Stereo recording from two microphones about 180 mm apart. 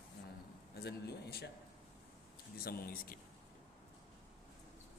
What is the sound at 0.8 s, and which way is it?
Speech, 65° left (ahead or behind).